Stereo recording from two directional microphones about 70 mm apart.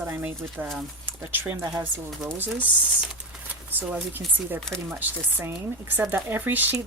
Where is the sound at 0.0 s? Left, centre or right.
Right.